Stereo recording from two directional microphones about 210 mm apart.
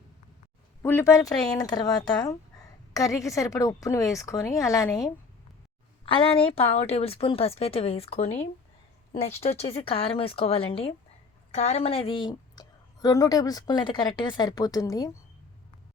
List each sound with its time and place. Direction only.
0.8 s a woman's voice: 10° left (ahead or behind)